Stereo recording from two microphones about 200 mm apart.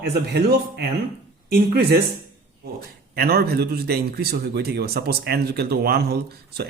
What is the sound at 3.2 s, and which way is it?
Speech, 50° right (ahead or behind).